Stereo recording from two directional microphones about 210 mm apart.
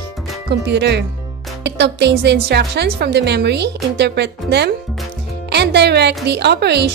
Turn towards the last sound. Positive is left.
turn(degrees=-50)  # may be behind; listen again after turning